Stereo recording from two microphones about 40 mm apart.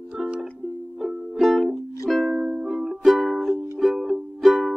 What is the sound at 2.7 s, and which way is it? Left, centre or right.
Music, centre.